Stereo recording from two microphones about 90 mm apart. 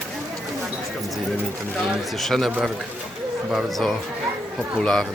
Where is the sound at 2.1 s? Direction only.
Centre (ahead or behind).